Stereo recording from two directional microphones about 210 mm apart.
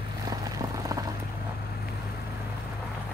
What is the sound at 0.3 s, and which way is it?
Vehicle, 15° right (ahead or behind).